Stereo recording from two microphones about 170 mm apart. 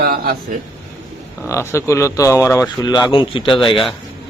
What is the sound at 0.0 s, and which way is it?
Speech, 60° right (ahead or behind).